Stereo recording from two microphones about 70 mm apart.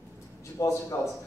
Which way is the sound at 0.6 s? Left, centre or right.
Left.